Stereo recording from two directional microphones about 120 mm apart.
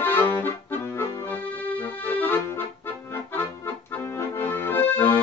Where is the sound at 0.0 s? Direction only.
15° left (ahead or behind).